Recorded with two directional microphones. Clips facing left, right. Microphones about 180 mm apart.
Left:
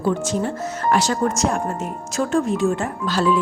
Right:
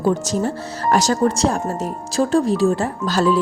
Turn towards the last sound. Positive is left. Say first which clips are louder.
# right 2 dB
turn(degrees=-40)  # may be behind; listen again after turning